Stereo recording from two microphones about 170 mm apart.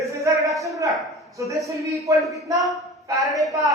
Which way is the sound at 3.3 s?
20° right (ahead or behind).